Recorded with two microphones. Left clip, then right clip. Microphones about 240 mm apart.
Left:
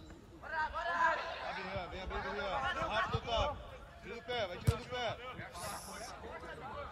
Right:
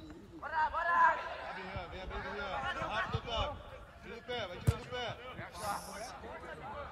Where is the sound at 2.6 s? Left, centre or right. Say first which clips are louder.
Even; centre.